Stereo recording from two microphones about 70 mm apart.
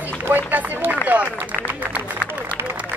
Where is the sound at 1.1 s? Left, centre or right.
Right.